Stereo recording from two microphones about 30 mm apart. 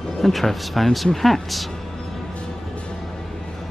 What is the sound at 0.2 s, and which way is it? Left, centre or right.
Speech, centre.